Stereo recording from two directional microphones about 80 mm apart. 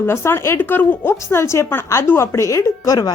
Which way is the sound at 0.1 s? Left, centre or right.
Left.